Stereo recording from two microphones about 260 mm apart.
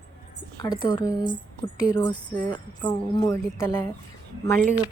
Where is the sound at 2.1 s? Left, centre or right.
Centre.